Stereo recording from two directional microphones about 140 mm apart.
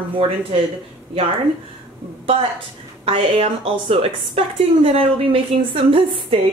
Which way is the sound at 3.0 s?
45° right (ahead or behind).